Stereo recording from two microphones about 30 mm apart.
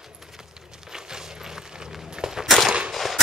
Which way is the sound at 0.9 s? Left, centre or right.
Centre.